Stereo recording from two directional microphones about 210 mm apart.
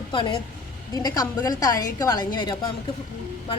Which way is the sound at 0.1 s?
25° left (ahead or behind).